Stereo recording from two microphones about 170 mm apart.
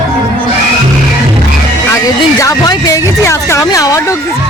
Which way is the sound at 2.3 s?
20° left (ahead or behind).